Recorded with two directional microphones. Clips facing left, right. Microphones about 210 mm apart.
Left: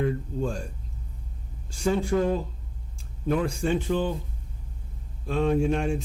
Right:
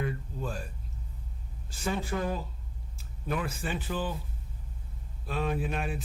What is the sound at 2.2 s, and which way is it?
Speech, 25° left (ahead or behind).